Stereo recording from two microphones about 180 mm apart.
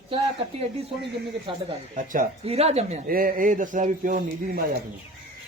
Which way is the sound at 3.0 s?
50° right (ahead or behind).